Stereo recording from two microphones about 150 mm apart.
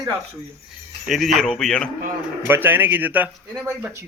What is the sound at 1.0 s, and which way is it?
Speech, centre (ahead or behind).